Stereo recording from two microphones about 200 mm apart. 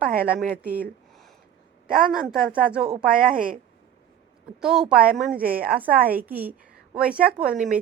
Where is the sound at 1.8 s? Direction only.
Centre (ahead or behind).